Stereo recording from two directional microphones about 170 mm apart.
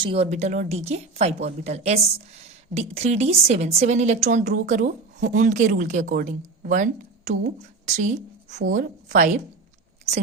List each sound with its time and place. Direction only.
0.0 s a woman's voice: 35° right (ahead or behind)